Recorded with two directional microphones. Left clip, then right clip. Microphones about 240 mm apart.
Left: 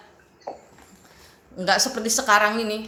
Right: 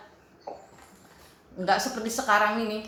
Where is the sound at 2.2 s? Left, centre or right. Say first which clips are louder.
Left 4 dB; left.